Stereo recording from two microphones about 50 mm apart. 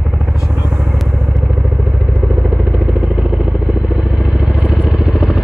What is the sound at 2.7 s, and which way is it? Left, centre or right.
Vehicle, right.